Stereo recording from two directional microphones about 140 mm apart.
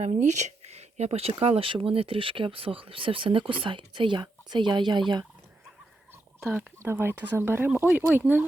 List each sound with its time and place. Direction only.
0.0 s speech: 55° right (ahead or behind); by 5.2 s 35° right (ahead or behind)
6.4 s speech: 15° right (ahead or behind)